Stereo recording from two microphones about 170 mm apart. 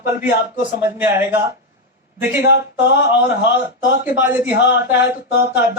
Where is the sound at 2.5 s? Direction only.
90° left.